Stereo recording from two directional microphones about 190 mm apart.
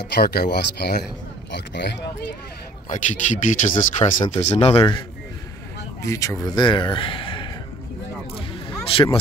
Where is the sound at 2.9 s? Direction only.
40° left (ahead or behind).